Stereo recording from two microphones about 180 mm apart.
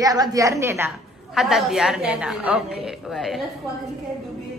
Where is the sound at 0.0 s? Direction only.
20° right (ahead or behind).